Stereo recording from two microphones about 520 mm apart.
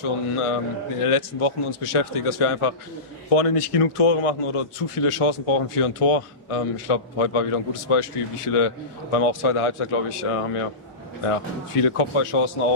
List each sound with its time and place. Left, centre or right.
0.0 s a man's voice: left
3.3 s a man's voice: left